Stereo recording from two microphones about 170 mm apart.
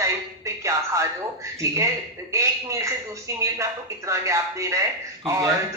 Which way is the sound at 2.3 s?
15° right (ahead or behind).